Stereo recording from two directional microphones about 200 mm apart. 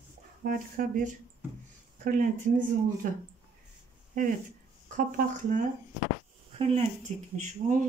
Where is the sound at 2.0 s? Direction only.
40° right (ahead or behind).